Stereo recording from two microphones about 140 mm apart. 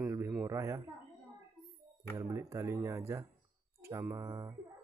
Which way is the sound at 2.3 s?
20° right (ahead or behind).